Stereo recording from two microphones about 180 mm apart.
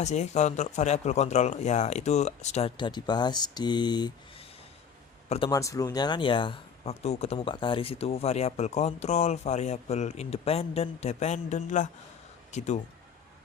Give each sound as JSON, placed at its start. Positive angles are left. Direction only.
{"t": 0.0, "sound": "speech", "side_deg": 40}
{"t": 5.5, "sound": "speech", "side_deg": 20}